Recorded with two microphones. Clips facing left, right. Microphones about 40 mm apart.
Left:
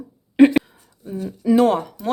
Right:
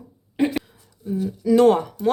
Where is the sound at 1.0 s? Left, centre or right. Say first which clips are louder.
Even; left.